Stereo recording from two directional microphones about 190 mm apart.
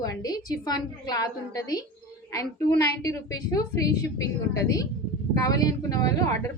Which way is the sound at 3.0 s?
20° left (ahead or behind).